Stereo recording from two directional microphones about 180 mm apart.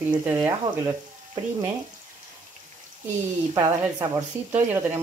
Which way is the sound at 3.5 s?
20° right (ahead or behind).